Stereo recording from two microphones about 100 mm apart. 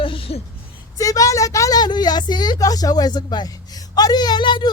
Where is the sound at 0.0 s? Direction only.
65° left (ahead or behind).